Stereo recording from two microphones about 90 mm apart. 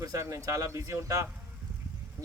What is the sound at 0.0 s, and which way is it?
A man's voice, 40° right (ahead or behind).